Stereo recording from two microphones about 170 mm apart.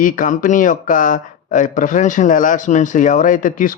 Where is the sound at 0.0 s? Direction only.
50° left (ahead or behind).